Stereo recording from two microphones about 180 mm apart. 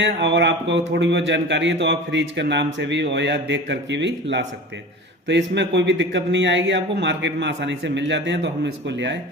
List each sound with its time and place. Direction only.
0.0 s a man's voice: 75° right (ahead or behind)